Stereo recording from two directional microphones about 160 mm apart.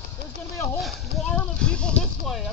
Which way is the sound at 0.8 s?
5° left (ahead or behind).